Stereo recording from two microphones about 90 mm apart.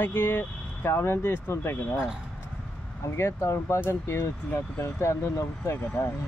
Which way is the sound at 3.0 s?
30° left (ahead or behind).